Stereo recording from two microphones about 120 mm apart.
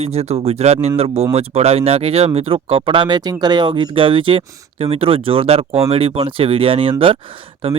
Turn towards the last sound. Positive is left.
turn(degrees=-50)  # may be behind; listen again after turning